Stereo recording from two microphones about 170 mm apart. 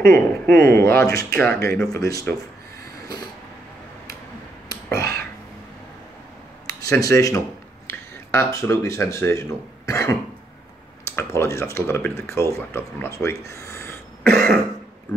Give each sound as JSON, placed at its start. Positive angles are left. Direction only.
{"t": 0.0, "sound": "speech", "side_deg": -65}
{"t": 0.6, "sound": "speech", "side_deg": 15}
{"t": 4.9, "sound": "finger snapping", "side_deg": -65}
{"t": 6.7, "sound": "speech", "side_deg": 20}
{"t": 9.8, "sound": "cough", "side_deg": 15}
{"t": 11.1, "sound": "speech", "side_deg": 15}
{"t": 14.3, "sound": "cough", "side_deg": 5}